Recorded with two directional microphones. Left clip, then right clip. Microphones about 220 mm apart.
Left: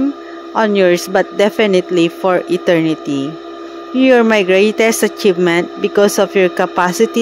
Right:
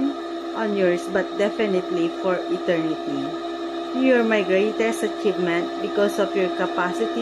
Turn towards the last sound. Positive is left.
turn(degrees=50)  # may be behind; listen again after turning